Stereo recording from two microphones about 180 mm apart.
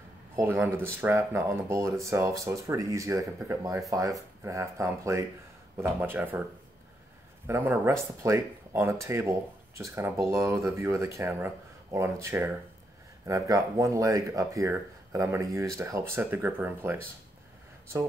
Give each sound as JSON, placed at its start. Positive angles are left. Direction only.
{"t": 0.4, "sound": "speech", "side_deg": -10}
{"t": 7.4, "sound": "speech", "side_deg": -10}